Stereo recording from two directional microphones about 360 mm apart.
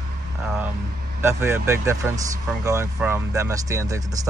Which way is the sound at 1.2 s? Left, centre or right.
Centre.